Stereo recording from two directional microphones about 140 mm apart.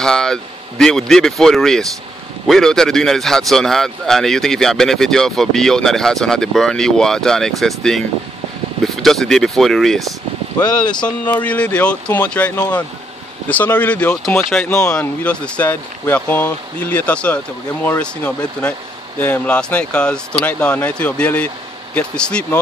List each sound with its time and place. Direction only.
0.0 s a man's voice: 5° left (ahead or behind)
10.6 s speech: 30° left (ahead or behind)
11.1 s speech: 10° left (ahead or behind)